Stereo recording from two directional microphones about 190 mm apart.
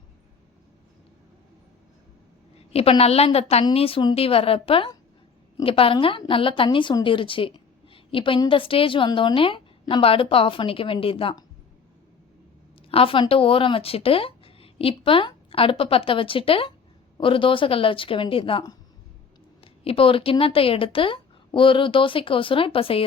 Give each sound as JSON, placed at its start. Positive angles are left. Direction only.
{"t": 2.7, "sound": "speech", "side_deg": 30}
{"t": 12.9, "sound": "speech", "side_deg": 30}